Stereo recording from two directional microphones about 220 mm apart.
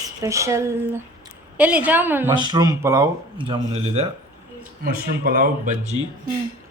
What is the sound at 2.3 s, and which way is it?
Speech, 20° right (ahead or behind).